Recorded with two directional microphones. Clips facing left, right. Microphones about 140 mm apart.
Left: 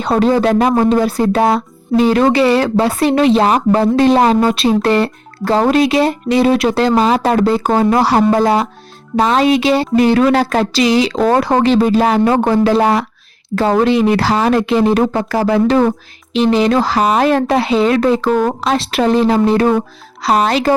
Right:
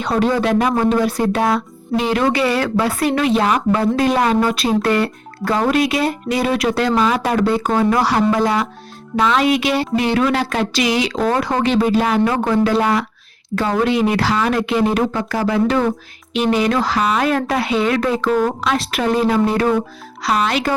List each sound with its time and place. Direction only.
0.0 s speech: 30° left (ahead or behind)